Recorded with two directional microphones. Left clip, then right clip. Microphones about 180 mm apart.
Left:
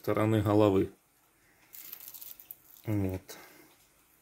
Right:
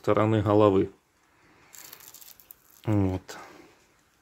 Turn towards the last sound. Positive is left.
turn(degrees=-30)  # may be behind; listen again after turning